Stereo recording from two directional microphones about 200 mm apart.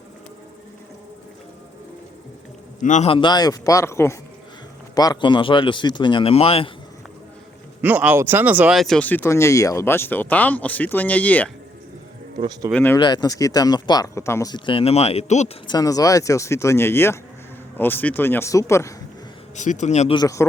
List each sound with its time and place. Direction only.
2.8 s speech: 35° left (ahead or behind)
7.8 s speech: 10° right (ahead or behind); by 11.5 s 10° left (ahead or behind)
12.4 s speech: 20° right (ahead or behind)
12.7 s speech: 10° left (ahead or behind)
13.0 s speech: 20° left (ahead or behind)
15.6 s speech: 20° left (ahead or behind)
19.5 s speech: 35° left (ahead or behind)
20.1 s speech: 15° left (ahead or behind)